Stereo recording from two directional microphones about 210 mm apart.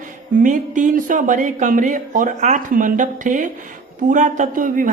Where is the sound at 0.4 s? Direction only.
40° right (ahead or behind).